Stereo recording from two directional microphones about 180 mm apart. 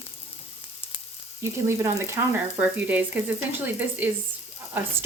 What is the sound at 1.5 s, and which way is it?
Speech, 15° right (ahead or behind).